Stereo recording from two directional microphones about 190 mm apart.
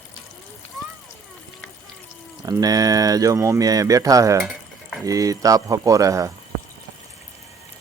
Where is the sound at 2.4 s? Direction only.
20° right (ahead or behind).